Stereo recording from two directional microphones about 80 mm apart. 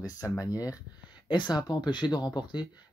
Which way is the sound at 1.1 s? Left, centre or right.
Left.